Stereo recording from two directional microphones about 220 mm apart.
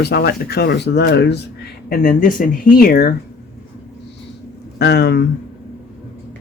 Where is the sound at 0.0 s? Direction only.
50° left (ahead or behind).